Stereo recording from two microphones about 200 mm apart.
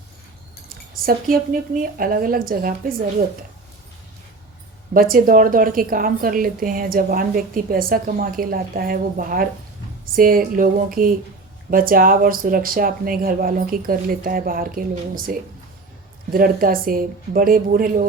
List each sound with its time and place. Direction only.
0.9 s a woman's voice: 45° right (ahead or behind)
4.9 s a woman's voice: 45° right (ahead or behind)